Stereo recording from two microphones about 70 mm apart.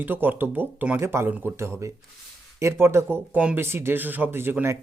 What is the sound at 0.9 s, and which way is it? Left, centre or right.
Speech, right.